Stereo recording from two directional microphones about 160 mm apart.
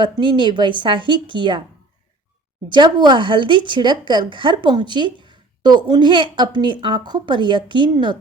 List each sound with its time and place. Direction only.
0.0 s speech: 30° right (ahead or behind)
2.6 s speech: 30° right (ahead or behind)